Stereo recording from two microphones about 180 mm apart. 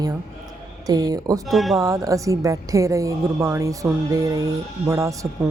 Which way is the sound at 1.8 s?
20° right (ahead or behind).